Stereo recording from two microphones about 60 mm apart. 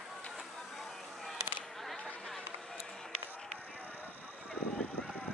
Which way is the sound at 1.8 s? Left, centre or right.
Centre.